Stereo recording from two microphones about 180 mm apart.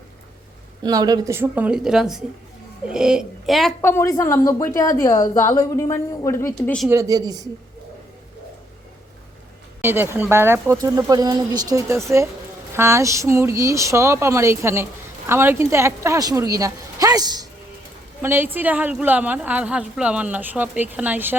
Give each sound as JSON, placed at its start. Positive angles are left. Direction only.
{"t": 0.8, "sound": "a woman's voice", "side_deg": -20}
{"t": 3.8, "sound": "a woman's voice", "side_deg": 15}
{"t": 6.6, "sound": "a child's voice", "side_deg": 0}
{"t": 6.9, "sound": "a woman's voice", "side_deg": -20}
{"t": 9.8, "sound": "a woman's voice", "side_deg": -10}